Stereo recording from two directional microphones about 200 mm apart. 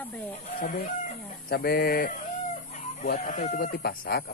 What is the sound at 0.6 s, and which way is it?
Speech, 50° left (ahead or behind).